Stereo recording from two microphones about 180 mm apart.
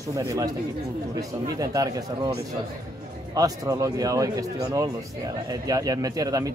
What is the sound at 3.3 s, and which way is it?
Speech, 20° right (ahead or behind).